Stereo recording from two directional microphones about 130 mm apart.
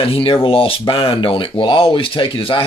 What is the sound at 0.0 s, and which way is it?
Speech, 45° left (ahead or behind).